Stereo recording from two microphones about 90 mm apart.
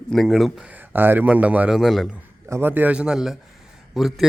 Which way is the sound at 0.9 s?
20° right (ahead or behind).